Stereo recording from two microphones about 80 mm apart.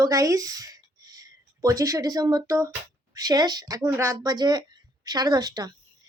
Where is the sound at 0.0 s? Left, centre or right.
Right.